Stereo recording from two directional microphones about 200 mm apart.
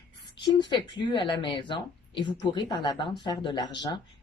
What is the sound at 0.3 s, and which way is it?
A woman's voice, 25° left (ahead or behind).